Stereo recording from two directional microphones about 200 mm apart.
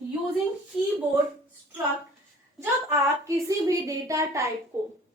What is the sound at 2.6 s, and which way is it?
A woman's voice, 15° right (ahead or behind).